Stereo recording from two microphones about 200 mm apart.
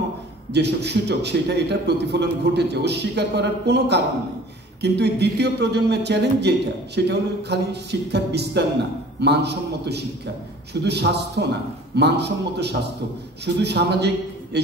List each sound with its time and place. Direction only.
0.5 s a man's voice: 55° right (ahead or behind)